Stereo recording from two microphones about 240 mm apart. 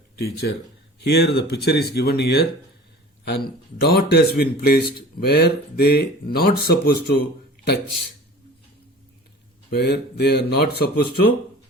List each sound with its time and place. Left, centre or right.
0.2 s a man's voice: left
9.7 s speech: left